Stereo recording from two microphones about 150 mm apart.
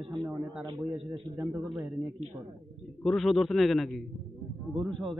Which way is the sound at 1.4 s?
Centre (ahead or behind).